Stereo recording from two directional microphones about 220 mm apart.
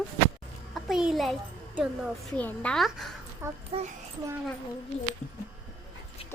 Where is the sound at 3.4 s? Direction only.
10° right (ahead or behind).